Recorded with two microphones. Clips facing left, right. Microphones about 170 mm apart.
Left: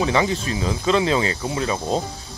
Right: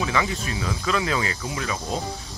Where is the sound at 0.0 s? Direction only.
30° left (ahead or behind).